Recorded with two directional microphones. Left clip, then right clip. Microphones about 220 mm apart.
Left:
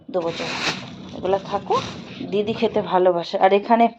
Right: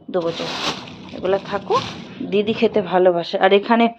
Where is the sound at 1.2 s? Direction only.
20° right (ahead or behind).